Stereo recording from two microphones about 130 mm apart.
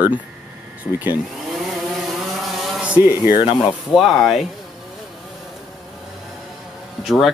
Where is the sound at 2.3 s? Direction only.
Centre (ahead or behind).